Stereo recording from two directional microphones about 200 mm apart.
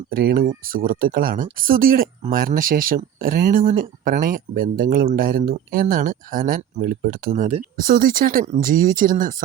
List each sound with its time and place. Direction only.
0.1 s speech: 50° right (ahead or behind)